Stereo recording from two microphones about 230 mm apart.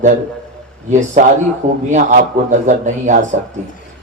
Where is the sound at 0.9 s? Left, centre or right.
Right.